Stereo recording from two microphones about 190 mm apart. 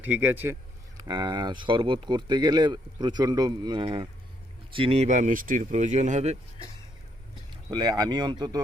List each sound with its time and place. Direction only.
0.0 s a man's voice: 10° right (ahead or behind)
0.9 s speech: 20° right (ahead or behind); by 6.3 s 35° right (ahead or behind)
7.5 s speech: 20° right (ahead or behind)